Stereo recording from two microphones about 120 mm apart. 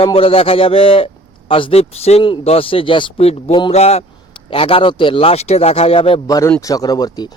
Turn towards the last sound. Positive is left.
turn(degrees=35)  # may be behind; listen again after turning